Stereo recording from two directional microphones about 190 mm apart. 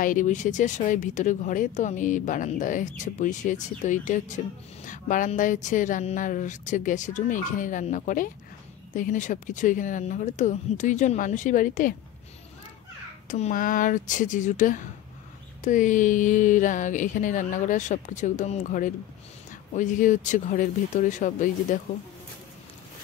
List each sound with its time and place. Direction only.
0.0 s speech: 45° left (ahead or behind)
13.3 s speech: 45° left (ahead or behind)